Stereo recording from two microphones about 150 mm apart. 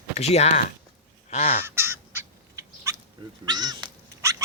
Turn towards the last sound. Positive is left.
turn(degrees=-20)  # may be behind; listen again after turning